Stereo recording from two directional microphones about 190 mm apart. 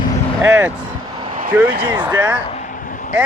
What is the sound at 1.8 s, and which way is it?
Speech, 20° right (ahead or behind).